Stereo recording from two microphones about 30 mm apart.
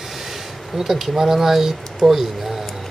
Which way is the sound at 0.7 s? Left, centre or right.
Centre.